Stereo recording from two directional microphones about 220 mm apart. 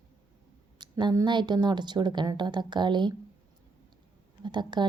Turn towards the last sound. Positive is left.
turn(degrees=-20)  # may be behind; listen again after turning